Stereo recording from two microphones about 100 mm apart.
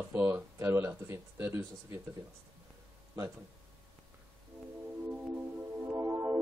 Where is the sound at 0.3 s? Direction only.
25° right (ahead or behind).